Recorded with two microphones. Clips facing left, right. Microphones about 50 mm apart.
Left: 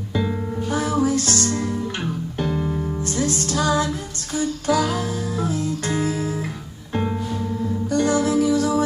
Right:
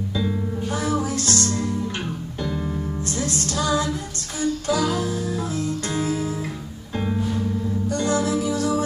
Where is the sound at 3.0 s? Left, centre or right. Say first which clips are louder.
Left 4 dB; left.